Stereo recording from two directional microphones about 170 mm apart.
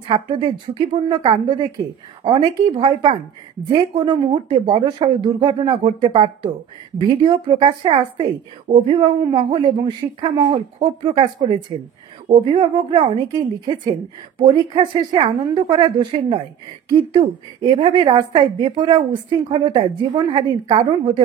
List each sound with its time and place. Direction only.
0.1 s a woman's voice: 25° right (ahead or behind)